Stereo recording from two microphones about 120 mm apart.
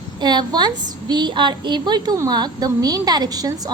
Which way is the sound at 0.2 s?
35° right (ahead or behind).